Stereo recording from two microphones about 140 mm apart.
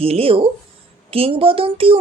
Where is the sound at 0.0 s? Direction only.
40° right (ahead or behind).